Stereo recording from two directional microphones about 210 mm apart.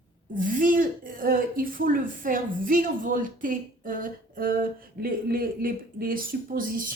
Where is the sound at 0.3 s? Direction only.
40° right (ahead or behind).